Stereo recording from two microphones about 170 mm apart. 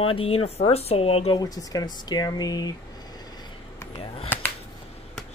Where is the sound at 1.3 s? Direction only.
20° left (ahead or behind).